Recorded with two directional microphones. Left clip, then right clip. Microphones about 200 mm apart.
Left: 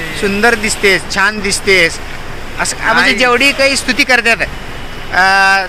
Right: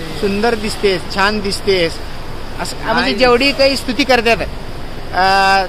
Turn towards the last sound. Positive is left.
turn(degrees=10)  # may be behind; listen again after turning